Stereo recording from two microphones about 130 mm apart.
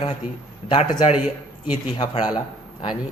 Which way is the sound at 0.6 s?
40° left (ahead or behind).